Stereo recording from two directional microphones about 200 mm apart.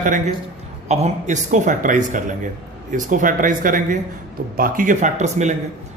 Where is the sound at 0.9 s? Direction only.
35° right (ahead or behind).